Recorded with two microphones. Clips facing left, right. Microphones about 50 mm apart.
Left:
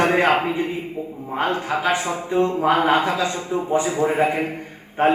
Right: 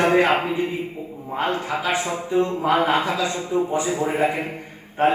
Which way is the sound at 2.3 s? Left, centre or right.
Left.